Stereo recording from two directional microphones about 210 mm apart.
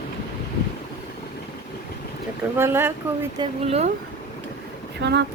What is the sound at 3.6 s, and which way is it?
Speech, 30° right (ahead or behind).